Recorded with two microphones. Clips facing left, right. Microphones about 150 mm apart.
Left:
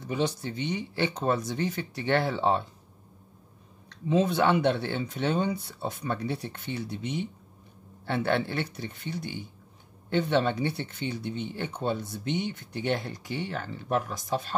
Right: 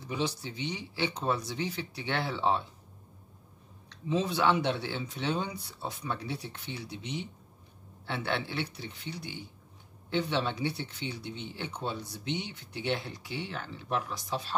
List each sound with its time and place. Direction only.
0.0 s speech: 50° left (ahead or behind)
4.1 s speech: 55° left (ahead or behind)